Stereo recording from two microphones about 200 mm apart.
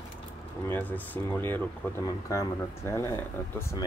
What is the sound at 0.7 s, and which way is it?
Speech, 10° left (ahead or behind).